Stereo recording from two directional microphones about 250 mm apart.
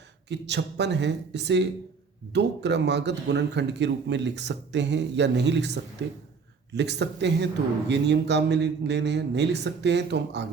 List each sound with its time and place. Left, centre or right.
0.3 s speech: right